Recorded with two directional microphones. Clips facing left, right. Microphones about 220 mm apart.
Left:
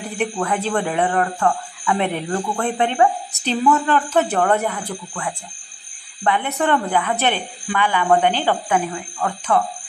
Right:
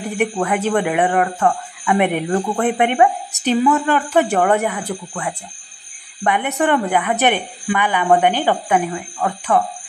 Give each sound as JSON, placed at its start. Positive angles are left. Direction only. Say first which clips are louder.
{"t": 0.0, "sound": "a woman's voice", "louder": "right 3 dB", "side_deg": -15}